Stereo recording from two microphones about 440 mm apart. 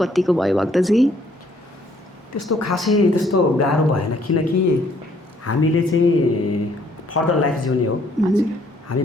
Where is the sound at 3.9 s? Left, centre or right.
Left.